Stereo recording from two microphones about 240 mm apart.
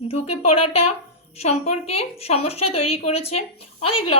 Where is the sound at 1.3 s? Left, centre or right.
Left.